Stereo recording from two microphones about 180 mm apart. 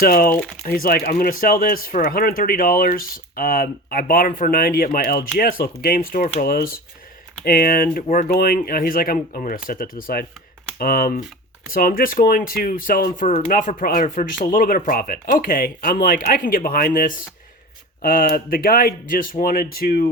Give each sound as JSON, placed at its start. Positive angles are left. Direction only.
{"t": 0.0, "sound": "speech", "side_deg": 55}